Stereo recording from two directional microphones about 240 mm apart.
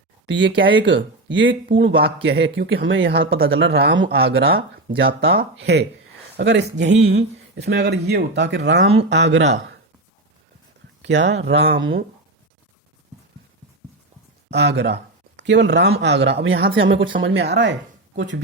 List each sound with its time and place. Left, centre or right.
0.3 s speech: right
11.0 s speech: right
14.5 s speech: right